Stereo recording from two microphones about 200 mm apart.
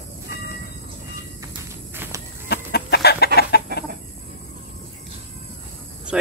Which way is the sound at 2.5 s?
55° left (ahead or behind).